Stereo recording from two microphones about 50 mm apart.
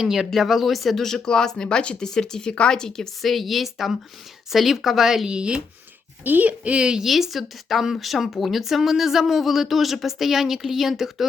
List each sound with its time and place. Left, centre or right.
0.0 s speech: centre
3.2 s speech: centre
5.3 s speech: centre
6.2 s speech: right
6.5 s speech: right
7.0 s speech: centre